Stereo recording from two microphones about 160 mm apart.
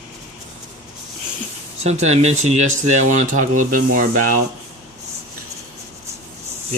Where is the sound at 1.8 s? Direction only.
45° right (ahead or behind).